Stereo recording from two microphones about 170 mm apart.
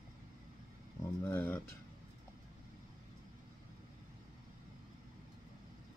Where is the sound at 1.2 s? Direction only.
15° left (ahead or behind).